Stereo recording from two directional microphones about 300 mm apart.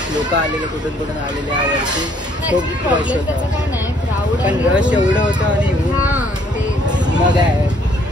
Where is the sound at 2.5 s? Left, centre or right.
Centre.